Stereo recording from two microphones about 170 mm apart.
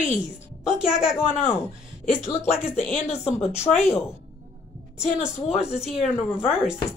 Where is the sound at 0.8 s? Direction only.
5° right (ahead or behind).